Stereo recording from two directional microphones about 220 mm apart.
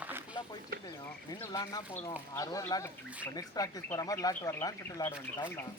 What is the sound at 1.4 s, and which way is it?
Speech, 15° left (ahead or behind).